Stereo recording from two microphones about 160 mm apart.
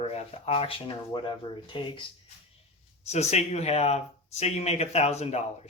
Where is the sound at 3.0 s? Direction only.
45° left (ahead or behind).